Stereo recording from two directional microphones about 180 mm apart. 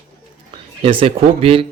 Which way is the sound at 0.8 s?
30° right (ahead or behind).